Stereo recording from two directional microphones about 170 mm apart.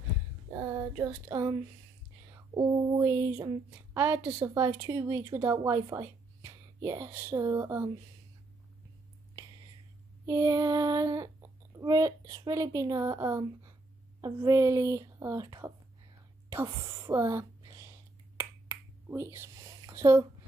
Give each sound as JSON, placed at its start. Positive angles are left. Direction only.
{"t": 0.9, "sound": "speech", "side_deg": -20}
{"t": 2.3, "sound": "a sound", "side_deg": -20}
{"t": 3.9, "sound": "a woman's voice", "side_deg": -15}
{"t": 10.2, "sound": "speech", "side_deg": -15}
{"t": 16.4, "sound": "a sound", "side_deg": -20}
{"t": 18.4, "sound": "finger snapping", "side_deg": -10}